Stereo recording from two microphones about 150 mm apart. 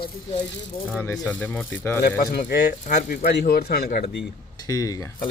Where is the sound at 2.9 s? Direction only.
80° left.